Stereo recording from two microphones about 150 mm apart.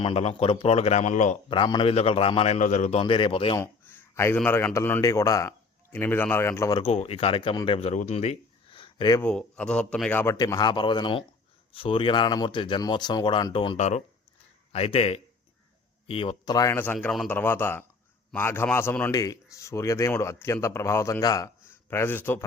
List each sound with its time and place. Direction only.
0.0 s speech: 40° left (ahead or behind)
1.5 s speech: 30° left (ahead or behind)
2.6 s speech: 55° left (ahead or behind)
3.0 s speech: 35° left (ahead or behind)
3.6 s a sound: 15° left (ahead or behind)
4.4 s a man's voice: 15° left (ahead or behind)
6.7 s speech: 45° left (ahead or behind)
8.8 s a sound: 30° left (ahead or behind)
9.2 s a man's voice: 5° left (ahead or behind)
10.3 s speech: 25° left (ahead or behind)
13.7 s speech: 50° left (ahead or behind); by 16.7 s 25° left (ahead or behind)
16.7 s a man's voice: 10° left (ahead or behind)